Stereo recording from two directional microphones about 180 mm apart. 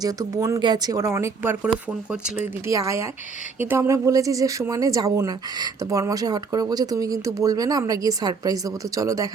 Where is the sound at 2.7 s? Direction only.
15° right (ahead or behind).